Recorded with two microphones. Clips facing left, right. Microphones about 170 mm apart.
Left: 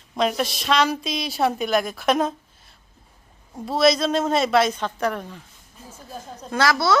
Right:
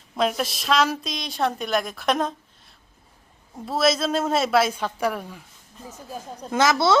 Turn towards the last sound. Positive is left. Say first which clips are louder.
# right 1 dB
turn(degrees=-25)  # may be behind; listen again after turning